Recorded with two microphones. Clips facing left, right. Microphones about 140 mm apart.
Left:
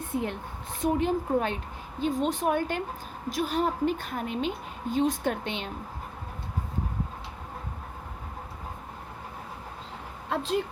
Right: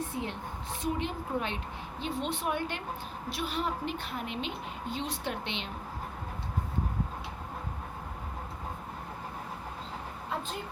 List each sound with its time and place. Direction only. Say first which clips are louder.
0.1 s a woman's voice: left 5 dB; 50° left (ahead or behind)